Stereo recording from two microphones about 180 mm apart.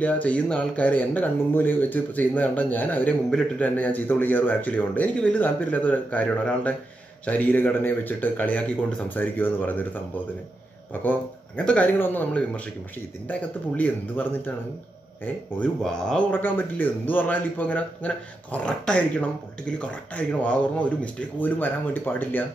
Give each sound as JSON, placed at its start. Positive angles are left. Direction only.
{"t": 0.0, "sound": "speech", "side_deg": 10}
{"t": 10.9, "sound": "speech", "side_deg": 10}
{"t": 15.6, "sound": "speech", "side_deg": 5}